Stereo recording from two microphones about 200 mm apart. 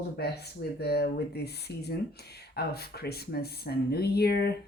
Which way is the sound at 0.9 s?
55° left (ahead or behind).